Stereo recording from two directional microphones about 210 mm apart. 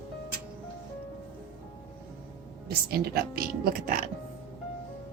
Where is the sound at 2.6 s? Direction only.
45° right (ahead or behind).